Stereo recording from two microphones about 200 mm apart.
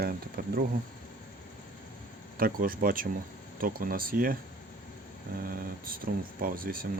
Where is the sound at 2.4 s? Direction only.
45° right (ahead or behind).